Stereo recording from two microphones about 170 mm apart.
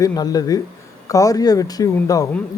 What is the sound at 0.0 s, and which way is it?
A man's voice, 20° left (ahead or behind).